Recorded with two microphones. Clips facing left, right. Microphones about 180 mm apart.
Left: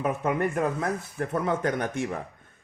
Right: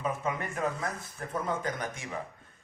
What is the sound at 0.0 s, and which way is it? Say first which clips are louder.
Speech: left 7 dB; 60° left (ahead or behind).